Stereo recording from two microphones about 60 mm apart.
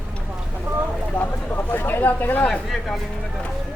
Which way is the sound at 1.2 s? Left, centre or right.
Left.